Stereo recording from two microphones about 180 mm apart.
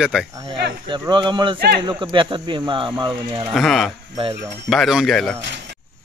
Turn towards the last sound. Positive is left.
turn(degrees=5)  # may be behind; listen again after turning